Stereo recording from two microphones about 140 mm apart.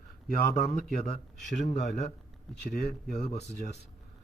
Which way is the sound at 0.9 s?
50° left (ahead or behind).